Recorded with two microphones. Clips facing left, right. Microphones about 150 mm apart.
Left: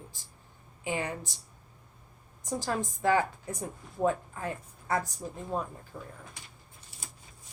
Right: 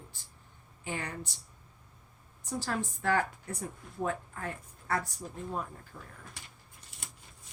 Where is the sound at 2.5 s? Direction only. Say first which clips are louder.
Left 2 dB; 15° left (ahead or behind).